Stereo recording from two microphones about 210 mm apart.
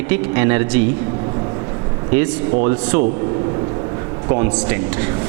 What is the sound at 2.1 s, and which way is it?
Speech, 15° right (ahead or behind).